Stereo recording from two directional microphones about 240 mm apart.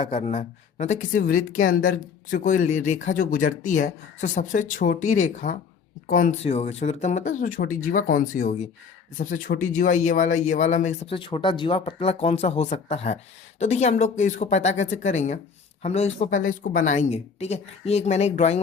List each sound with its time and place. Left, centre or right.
0.0 s speech: left